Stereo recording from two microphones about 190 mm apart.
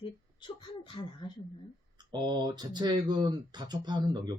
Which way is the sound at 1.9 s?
25° right (ahead or behind).